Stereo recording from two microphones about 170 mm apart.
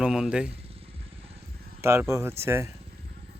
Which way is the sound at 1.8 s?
15° right (ahead or behind).